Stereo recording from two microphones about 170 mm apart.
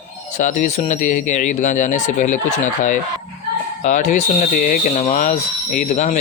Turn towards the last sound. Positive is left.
turn(degrees=45)  # may be behind; listen again after turning